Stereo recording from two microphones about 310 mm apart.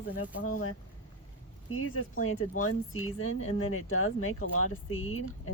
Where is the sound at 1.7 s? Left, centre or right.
Left.